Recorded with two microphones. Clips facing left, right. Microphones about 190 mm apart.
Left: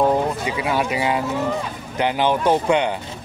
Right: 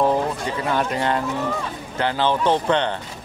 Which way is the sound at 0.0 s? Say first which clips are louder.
Left 1 dB; 15° left (ahead or behind).